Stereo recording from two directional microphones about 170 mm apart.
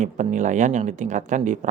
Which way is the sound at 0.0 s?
45° right (ahead or behind).